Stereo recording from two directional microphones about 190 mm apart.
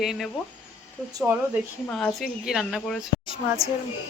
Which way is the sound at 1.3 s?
15° right (ahead or behind).